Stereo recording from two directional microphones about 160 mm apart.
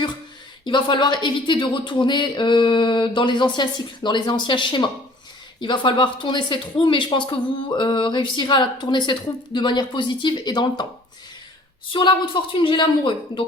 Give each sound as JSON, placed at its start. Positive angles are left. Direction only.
{"t": 0.6, "sound": "speech", "side_deg": 30}
{"t": 11.9, "sound": "a woman's voice", "side_deg": 30}